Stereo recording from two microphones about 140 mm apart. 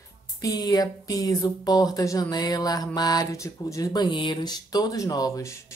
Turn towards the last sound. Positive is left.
turn(degrees=25)  # may be behind; listen again after turning